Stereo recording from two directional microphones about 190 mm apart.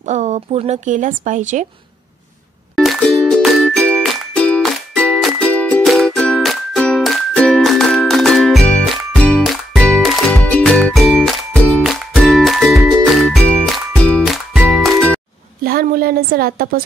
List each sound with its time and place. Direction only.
0.0 s a woman's voice: 40° right (ahead or behind)
2.7 s music: centre (ahead or behind)
15.6 s a sound: 50° right (ahead or behind)